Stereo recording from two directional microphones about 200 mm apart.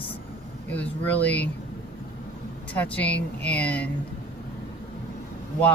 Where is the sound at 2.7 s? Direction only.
10° left (ahead or behind).